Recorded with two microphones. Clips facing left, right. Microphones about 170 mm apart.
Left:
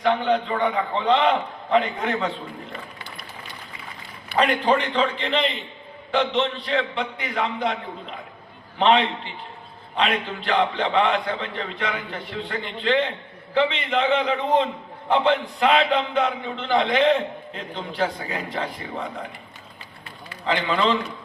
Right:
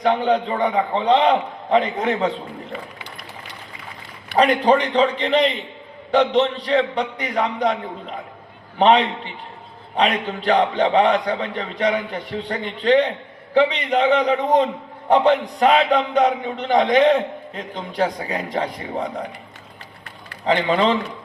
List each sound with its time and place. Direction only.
0.0 s a man's voice: 40° right (ahead or behind)
4.4 s a man's voice: 40° right (ahead or behind)
8.8 s a man's voice: 40° right (ahead or behind)
20.4 s a man's voice: 40° right (ahead or behind)